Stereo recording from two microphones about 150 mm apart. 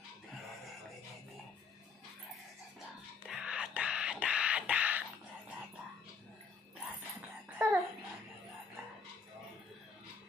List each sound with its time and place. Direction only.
3.3 s whispering: 5° right (ahead or behind)
7.5 s babbling: 15° right (ahead or behind)